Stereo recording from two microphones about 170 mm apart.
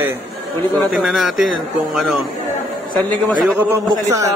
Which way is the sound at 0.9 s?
Centre (ahead or behind).